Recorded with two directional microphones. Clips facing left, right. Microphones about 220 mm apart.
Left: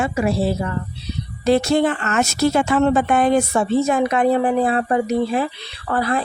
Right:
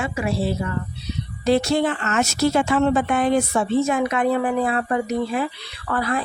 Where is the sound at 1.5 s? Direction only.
50° left (ahead or behind).